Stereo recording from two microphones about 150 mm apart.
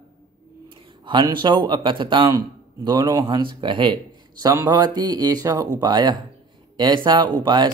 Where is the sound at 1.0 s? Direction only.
30° right (ahead or behind).